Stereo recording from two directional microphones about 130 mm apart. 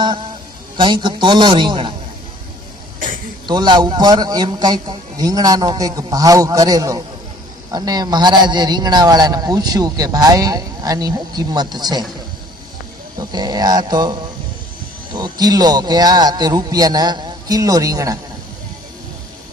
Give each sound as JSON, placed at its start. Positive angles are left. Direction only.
{"t": 0.8, "sound": "a man's voice", "side_deg": -35}
{"t": 3.4, "sound": "a man's voice", "side_deg": -35}
{"t": 13.1, "sound": "a man's voice", "side_deg": -30}